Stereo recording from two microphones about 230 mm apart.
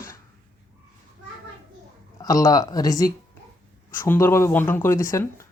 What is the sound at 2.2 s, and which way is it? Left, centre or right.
Speech, centre.